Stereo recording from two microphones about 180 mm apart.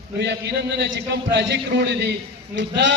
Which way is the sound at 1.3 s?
70° right (ahead or behind).